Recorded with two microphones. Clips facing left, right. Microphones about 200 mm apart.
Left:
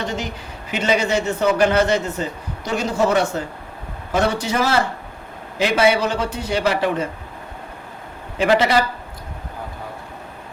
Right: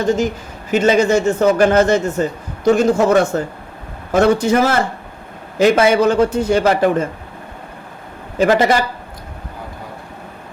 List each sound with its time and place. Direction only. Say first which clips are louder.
0.0 s a man's voice: right 9 dB; 45° right (ahead or behind)
8.4 s a man's voice: right 3 dB; 45° right (ahead or behind)